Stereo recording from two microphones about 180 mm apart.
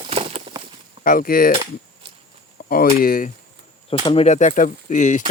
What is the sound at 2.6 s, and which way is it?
Speech, 55° left (ahead or behind).